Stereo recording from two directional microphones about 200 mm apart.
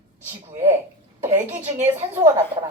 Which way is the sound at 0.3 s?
15° right (ahead or behind).